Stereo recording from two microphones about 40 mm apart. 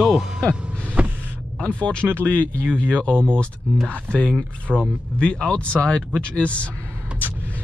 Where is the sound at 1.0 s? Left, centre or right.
Right.